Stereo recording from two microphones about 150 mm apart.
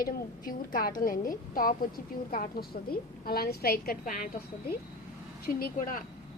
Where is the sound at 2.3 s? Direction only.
80° left.